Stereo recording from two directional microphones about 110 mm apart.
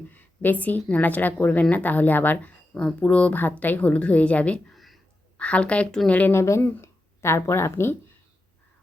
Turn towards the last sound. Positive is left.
turn(degrees=25)  # may be behind; listen again after turning